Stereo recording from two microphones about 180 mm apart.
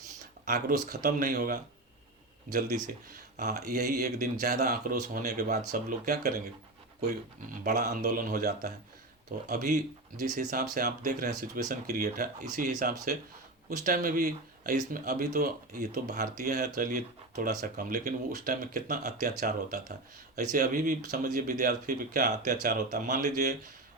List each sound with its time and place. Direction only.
0.4 s speech: 50° right (ahead or behind)
7.6 s speech: 45° right (ahead or behind)
9.5 s speech: 45° right (ahead or behind)
10.5 s speech: 55° right (ahead or behind)